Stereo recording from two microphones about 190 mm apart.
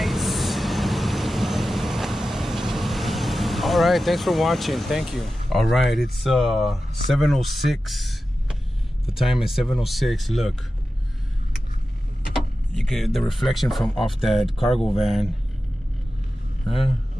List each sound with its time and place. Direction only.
0.0 s vehicle: centre (ahead or behind)
6.1 s speech: centre (ahead or behind)
12.7 s speech: centre (ahead or behind)